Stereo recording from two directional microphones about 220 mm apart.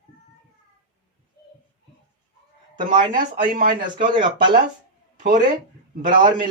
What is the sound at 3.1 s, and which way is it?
Speech, 40° right (ahead or behind).